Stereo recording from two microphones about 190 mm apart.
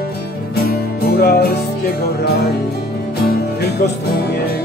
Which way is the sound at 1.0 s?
55° left (ahead or behind).